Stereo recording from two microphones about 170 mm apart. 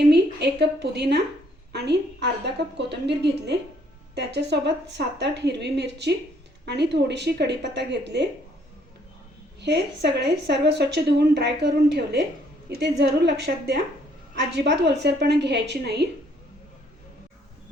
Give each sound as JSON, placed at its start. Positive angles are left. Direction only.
{"t": 0.1, "sound": "a woman's voice", "side_deg": -80}
{"t": 9.6, "sound": "a woman's voice", "side_deg": -90}
{"t": 13.0, "sound": "a woman's voice", "side_deg": -90}